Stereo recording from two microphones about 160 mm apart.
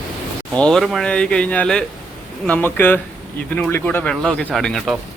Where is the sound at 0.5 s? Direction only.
5° left (ahead or behind).